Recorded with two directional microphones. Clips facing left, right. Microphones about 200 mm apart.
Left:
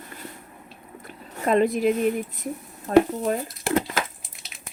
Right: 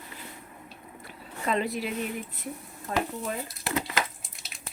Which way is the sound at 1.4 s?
50° left (ahead or behind).